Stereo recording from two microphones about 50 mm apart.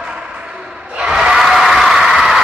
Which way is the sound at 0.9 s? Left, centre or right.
Centre.